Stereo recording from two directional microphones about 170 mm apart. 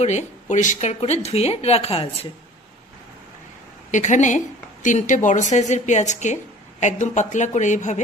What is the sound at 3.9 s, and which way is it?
A woman's voice, 45° left (ahead or behind).